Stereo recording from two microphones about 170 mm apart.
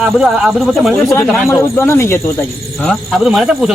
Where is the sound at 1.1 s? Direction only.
15° left (ahead or behind).